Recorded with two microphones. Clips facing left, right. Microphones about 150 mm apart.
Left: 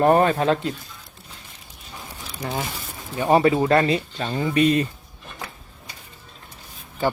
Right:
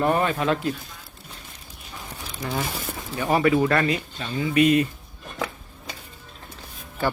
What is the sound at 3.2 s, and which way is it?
Speech, 25° left (ahead or behind).